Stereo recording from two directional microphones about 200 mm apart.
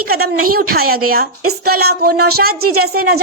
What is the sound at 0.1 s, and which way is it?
A woman's voice, 50° right (ahead or behind).